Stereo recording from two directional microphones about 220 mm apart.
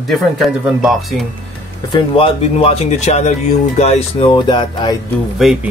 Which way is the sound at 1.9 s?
25° left (ahead or behind).